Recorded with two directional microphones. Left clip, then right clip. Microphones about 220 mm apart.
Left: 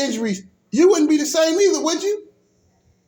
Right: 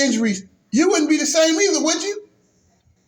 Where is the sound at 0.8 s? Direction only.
35° left (ahead or behind).